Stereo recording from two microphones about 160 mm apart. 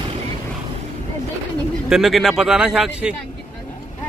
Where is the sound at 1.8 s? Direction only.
Centre (ahead or behind).